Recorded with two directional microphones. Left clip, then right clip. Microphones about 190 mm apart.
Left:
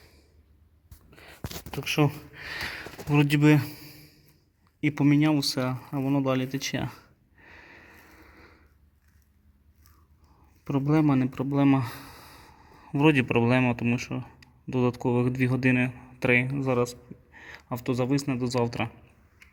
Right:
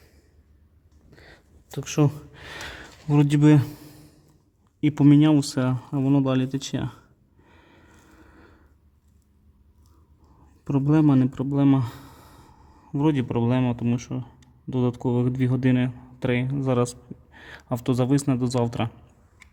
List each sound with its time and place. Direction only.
1.1 s a sound: 15° right (ahead or behind)
1.8 s speech: 30° right (ahead or behind)
4.8 s speech: 30° right (ahead or behind)
7.4 s a sound: 5° right (ahead or behind)
10.6 s speech: 25° right (ahead or behind)
16.6 s speech: 30° right (ahead or behind)